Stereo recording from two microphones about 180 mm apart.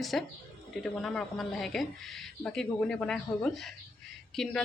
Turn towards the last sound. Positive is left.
turn(degrees=0)  # may be behind; listen again after turning